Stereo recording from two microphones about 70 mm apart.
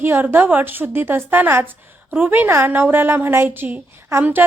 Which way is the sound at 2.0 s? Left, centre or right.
Centre.